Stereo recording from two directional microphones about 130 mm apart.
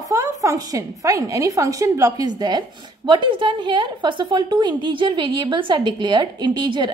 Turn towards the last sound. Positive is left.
turn(degrees=-35)  # may be behind; listen again after turning